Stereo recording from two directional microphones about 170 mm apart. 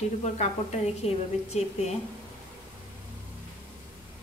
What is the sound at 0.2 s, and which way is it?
A woman's voice, 40° left (ahead or behind).